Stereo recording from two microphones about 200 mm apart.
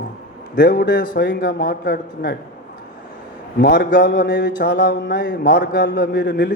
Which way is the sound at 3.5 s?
55° left (ahead or behind).